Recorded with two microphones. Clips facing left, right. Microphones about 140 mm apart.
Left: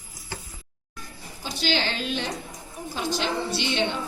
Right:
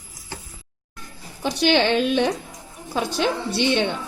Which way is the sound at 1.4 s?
60° right (ahead or behind).